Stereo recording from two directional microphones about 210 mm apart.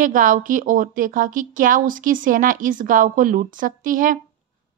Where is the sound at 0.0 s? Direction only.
40° right (ahead or behind).